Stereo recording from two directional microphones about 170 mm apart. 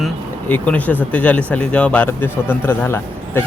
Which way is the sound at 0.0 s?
10° left (ahead or behind).